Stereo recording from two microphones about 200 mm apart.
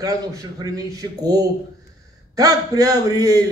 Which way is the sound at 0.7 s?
20° right (ahead or behind).